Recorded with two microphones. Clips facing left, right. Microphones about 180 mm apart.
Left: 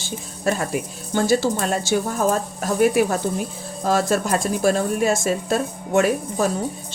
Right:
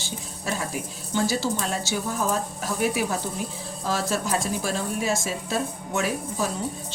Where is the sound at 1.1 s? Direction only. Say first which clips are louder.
Left 6 dB; 55° left (ahead or behind).